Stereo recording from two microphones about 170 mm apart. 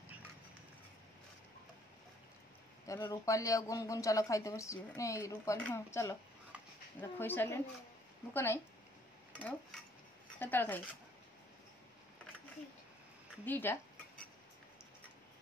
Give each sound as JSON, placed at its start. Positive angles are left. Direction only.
{"t": 2.9, "sound": "a man's voice", "side_deg": 20}
{"t": 13.5, "sound": "speech", "side_deg": 10}